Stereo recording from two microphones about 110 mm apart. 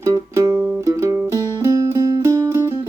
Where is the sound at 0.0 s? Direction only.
25° right (ahead or behind).